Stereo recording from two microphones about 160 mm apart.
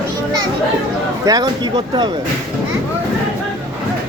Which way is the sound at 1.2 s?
25° right (ahead or behind).